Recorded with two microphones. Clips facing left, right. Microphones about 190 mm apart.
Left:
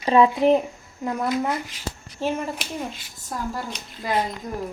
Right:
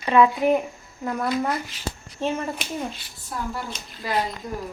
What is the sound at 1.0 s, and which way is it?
Speech, 15° left (ahead or behind).